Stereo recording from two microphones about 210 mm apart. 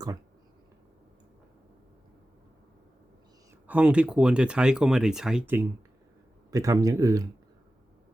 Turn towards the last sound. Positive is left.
turn(degrees=-15)  # may be behind; listen again after turning